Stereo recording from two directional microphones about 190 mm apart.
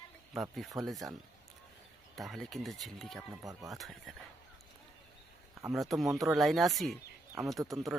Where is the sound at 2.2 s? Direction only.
Centre (ahead or behind).